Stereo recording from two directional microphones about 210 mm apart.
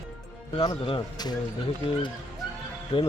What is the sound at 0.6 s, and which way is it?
Speech, 20° left (ahead or behind).